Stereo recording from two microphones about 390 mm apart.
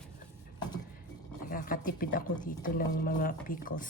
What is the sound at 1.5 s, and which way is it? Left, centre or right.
Speech, left.